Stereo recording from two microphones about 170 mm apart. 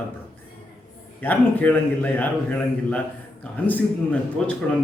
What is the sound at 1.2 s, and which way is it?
A man's voice, 10° left (ahead or behind).